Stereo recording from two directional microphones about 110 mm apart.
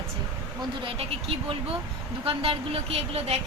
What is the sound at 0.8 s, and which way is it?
A woman's voice, 55° right (ahead or behind).